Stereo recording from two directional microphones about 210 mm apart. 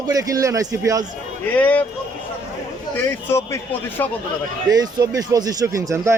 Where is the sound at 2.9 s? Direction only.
10° left (ahead or behind).